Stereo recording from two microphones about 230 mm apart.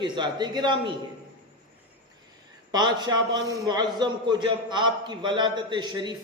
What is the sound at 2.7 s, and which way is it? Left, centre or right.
A man's voice, centre.